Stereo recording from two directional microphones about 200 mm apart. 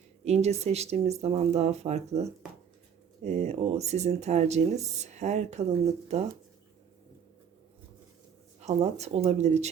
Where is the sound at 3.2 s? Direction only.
35° right (ahead or behind).